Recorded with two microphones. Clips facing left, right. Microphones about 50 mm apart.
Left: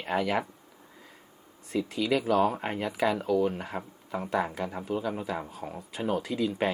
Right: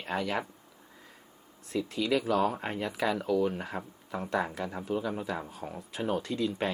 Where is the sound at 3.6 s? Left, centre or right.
Centre.